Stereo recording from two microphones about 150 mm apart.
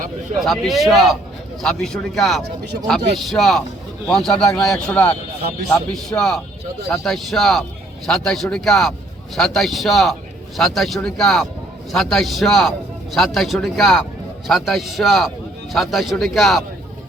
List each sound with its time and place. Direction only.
0.3 s a man's voice: centre (ahead or behind)